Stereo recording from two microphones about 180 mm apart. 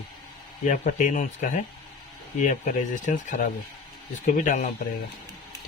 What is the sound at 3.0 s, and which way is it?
Speech, 45° left (ahead or behind).